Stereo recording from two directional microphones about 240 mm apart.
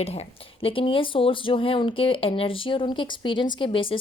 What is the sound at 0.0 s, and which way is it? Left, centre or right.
A woman's voice, left.